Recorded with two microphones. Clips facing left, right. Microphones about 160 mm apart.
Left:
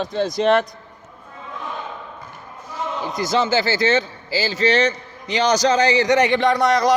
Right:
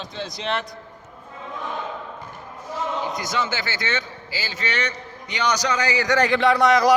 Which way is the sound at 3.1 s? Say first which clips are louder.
Left 7 dB; 30° left (ahead or behind).